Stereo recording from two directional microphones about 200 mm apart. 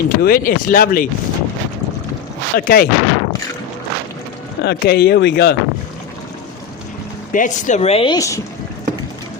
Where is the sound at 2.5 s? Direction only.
50° left (ahead or behind).